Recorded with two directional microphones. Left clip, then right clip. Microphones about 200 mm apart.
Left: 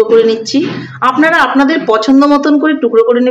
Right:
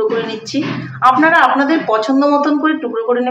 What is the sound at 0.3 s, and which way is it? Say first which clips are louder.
A woman's voice: left 7 dB; 45° left (ahead or behind).